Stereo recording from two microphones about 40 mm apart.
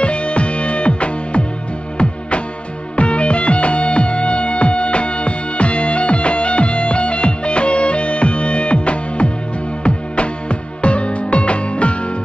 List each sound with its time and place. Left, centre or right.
0.0 s music: left
3.0 s music: left